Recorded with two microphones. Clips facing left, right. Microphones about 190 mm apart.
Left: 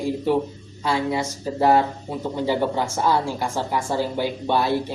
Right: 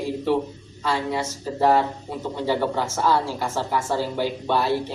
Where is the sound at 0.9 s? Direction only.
15° left (ahead or behind).